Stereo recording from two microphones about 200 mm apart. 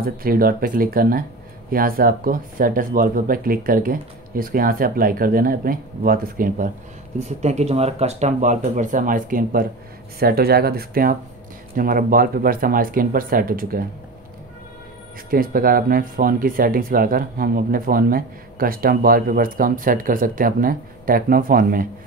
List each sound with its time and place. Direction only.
0.0 s speech: 45° right (ahead or behind)
7.2 s speech: 35° right (ahead or behind)
15.2 s speech: 45° right (ahead or behind)